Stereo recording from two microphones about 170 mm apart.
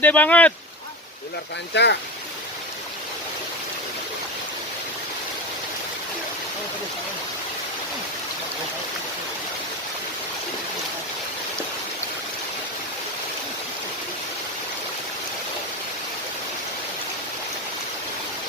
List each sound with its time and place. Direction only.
0.0 s speech: 10° left (ahead or behind)
1.7 s speech: 90° left